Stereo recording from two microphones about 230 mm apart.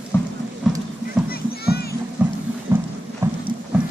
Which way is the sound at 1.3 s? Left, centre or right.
Left.